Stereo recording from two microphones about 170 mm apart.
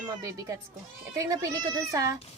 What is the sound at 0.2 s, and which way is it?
A woman's voice, 20° right (ahead or behind).